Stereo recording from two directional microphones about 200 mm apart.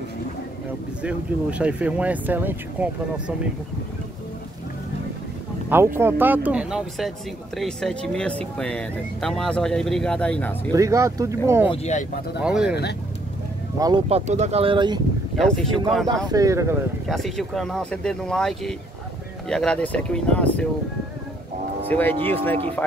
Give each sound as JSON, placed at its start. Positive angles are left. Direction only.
{"t": 1.0, "sound": "speech", "side_deg": -5}
{"t": 5.9, "sound": "speech", "side_deg": -10}
{"t": 10.7, "sound": "speech", "side_deg": -15}
{"t": 11.7, "sound": "speech", "side_deg": 35}
{"t": 12.4, "sound": "speech", "side_deg": -5}
{"t": 13.7, "sound": "speech", "side_deg": -20}
{"t": 14.0, "sound": "speech", "side_deg": -35}
{"t": 15.3, "sound": "speech", "side_deg": 0}
{"t": 16.3, "sound": "speech", "side_deg": -15}
{"t": 17.1, "sound": "speech", "side_deg": 0}
{"t": 21.8, "sound": "speech", "side_deg": 10}